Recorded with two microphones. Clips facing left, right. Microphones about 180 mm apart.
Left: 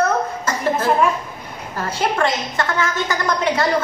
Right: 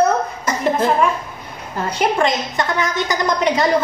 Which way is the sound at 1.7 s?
15° right (ahead or behind).